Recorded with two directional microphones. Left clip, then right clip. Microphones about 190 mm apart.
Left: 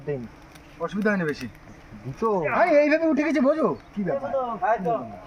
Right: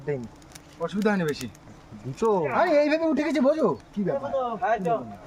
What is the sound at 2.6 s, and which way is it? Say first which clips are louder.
Speech: left 4 dB; 15° right (ahead or behind).